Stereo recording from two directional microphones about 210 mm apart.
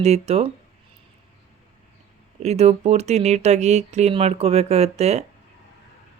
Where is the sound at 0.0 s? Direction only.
30° right (ahead or behind).